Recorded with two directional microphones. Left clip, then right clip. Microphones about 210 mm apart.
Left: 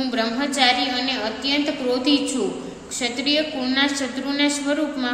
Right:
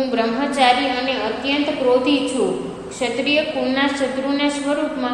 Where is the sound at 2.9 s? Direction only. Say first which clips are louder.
Right 3 dB; 30° left (ahead or behind).